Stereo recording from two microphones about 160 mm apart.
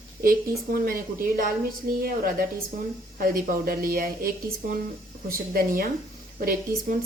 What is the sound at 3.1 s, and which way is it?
Speech, 60° right (ahead or behind).